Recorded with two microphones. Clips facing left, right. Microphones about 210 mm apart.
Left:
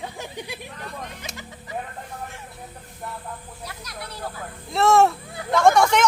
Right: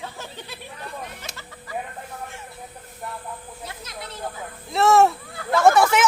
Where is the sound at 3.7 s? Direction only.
25° right (ahead or behind).